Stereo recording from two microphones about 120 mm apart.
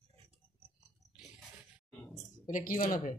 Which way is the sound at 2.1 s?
90° left.